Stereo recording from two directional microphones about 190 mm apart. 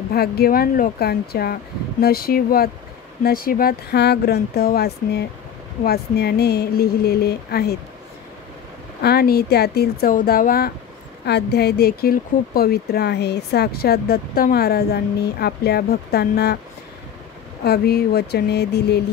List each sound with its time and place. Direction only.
0.1 s speech: 55° left (ahead or behind)
9.0 s speech: 55° left (ahead or behind)
17.6 s speech: 55° left (ahead or behind)